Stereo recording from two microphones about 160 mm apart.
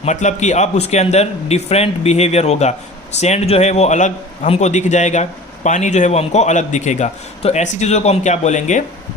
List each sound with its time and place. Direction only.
0.0 s a man's voice: 45° left (ahead or behind)